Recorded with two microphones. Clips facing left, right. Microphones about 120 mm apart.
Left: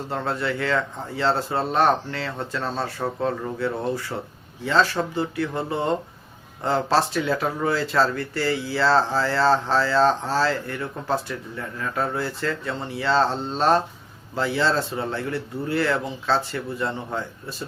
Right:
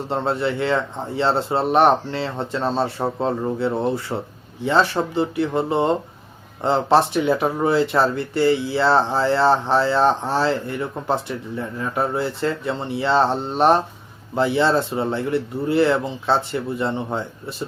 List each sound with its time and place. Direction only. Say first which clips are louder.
0.1 s speech: right 4 dB; 25° right (ahead or behind)